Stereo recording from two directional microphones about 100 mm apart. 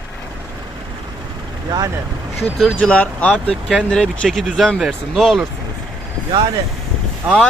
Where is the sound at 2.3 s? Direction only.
Centre (ahead or behind).